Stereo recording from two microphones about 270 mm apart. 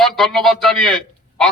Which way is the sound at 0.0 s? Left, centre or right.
Centre.